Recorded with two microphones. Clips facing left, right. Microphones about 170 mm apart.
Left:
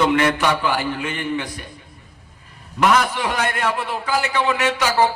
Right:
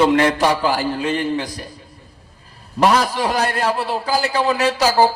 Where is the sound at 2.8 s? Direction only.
35° right (ahead or behind).